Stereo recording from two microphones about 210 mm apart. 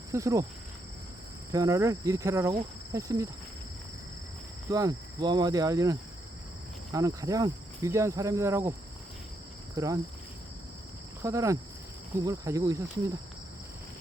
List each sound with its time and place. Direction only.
0.1 s cricket: 15° right (ahead or behind)
1.5 s cricket: 15° right (ahead or behind)
4.7 s cricket: 15° right (ahead or behind)
9.7 s cricket: 15° right (ahead or behind)
11.2 s cricket: 15° right (ahead or behind)